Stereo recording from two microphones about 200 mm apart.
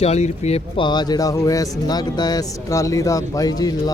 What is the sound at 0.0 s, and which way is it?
Speech, 30° left (ahead or behind).